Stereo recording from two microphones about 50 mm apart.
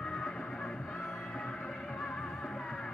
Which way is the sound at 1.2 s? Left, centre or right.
Left.